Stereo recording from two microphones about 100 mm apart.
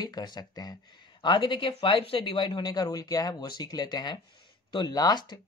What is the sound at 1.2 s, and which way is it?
Speech, 55° left (ahead or behind).